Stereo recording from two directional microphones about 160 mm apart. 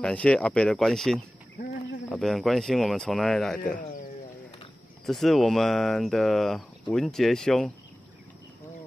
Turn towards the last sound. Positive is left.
turn(degrees=5)  # may be behind; listen again after turning